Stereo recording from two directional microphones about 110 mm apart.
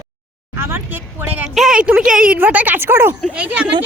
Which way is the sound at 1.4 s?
5° right (ahead or behind).